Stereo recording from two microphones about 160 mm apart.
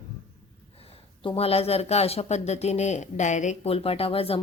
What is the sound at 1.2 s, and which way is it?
Speech, 40° left (ahead or behind).